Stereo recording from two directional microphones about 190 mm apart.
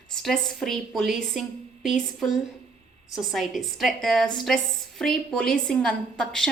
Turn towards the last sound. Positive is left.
turn(degrees=5)  # may be behind; listen again after turning